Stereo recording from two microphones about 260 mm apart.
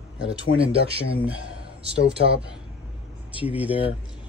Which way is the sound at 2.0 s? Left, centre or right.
Right.